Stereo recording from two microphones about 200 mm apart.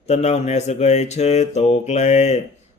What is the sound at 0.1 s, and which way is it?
Speech, 35° left (ahead or behind).